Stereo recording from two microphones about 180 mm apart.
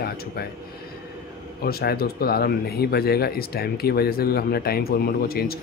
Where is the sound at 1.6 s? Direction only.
60° left (ahead or behind).